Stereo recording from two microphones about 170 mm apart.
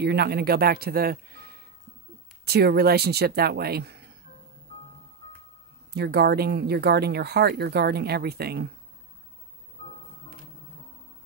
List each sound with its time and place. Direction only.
0.0 s speech: 70° right (ahead or behind)
5.9 s speech: 70° right (ahead or behind)